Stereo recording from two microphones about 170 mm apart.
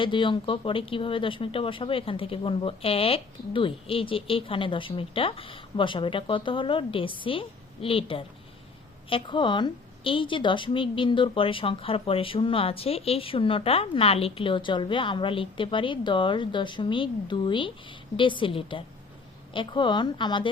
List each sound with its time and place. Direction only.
0.0 s a woman's voice: 30° left (ahead or behind)